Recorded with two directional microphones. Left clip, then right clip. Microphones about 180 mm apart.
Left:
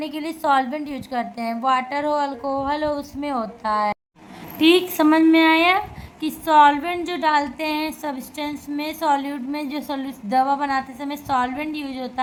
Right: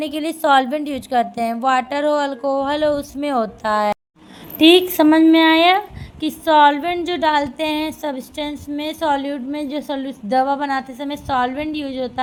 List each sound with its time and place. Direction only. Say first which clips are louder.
0.0 s a woman's voice: right 4 dB; 30° right (ahead or behind)